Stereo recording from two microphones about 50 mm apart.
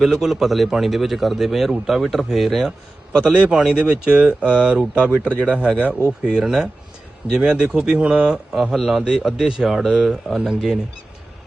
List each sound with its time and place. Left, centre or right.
0.0 s a man's voice: centre
3.3 s speech: right
8.5 s a man's voice: centre